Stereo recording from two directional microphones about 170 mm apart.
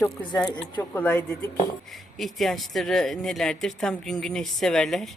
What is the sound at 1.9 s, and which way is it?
Speech, centre (ahead or behind).